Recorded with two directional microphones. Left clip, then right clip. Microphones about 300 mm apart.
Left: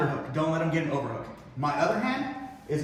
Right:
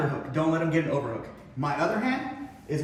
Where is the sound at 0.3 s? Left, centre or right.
Centre.